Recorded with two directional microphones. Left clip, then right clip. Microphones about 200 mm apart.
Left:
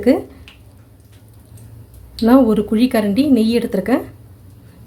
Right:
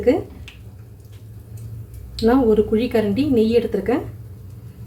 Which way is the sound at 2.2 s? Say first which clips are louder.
Left 2 dB; 45° left (ahead or behind).